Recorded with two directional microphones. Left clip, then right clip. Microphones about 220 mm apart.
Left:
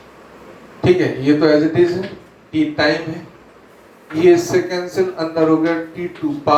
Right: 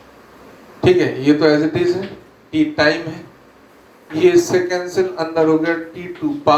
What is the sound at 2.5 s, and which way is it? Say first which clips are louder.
Speech: right 1 dB; 35° right (ahead or behind).